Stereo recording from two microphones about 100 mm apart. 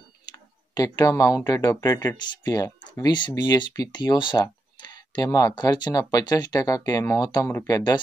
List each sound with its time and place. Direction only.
0.3 s speech: 40° left (ahead or behind)
2.9 s speech: 50° left (ahead or behind)
7.4 s speech: 35° left (ahead or behind)